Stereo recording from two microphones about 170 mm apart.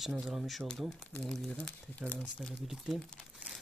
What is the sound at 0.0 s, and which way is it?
Speech, centre (ahead or behind).